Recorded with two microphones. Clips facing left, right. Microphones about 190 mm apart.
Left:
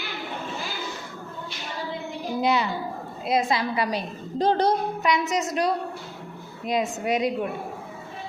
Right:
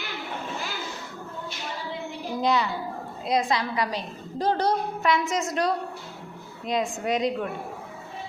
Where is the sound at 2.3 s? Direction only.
10° left (ahead or behind).